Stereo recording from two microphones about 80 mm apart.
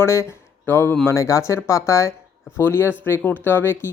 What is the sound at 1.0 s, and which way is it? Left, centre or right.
Speech, left.